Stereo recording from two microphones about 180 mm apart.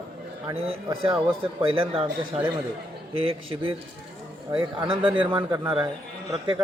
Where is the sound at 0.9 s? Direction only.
30° right (ahead or behind).